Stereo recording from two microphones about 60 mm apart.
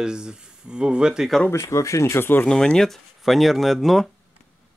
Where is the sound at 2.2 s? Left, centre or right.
Left.